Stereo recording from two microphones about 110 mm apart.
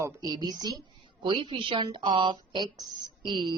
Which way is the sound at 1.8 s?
45° right (ahead or behind).